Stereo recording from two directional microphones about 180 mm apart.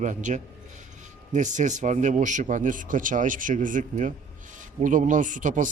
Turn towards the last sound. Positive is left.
turn(degrees=-45)  # may be behind; listen again after turning